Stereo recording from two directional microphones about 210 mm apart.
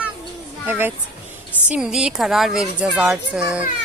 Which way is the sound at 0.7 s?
10° right (ahead or behind).